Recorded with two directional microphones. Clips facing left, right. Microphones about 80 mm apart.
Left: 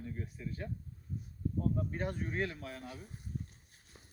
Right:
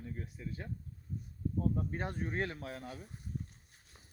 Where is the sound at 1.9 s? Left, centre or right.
Right.